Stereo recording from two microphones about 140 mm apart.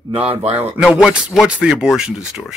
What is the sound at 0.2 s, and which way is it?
Speech, 45° right (ahead or behind).